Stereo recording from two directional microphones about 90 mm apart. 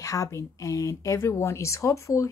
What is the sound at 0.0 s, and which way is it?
Speech, 35° left (ahead or behind).